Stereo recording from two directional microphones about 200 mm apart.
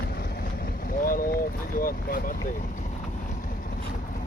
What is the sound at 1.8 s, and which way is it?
Speech, 45° left (ahead or behind).